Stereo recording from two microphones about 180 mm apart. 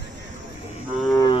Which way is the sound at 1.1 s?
20° left (ahead or behind).